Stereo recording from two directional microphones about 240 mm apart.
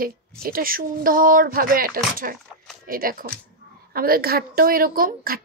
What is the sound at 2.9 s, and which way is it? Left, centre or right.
A woman's voice, right.